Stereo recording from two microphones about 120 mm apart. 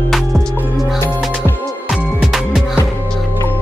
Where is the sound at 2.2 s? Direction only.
Centre (ahead or behind).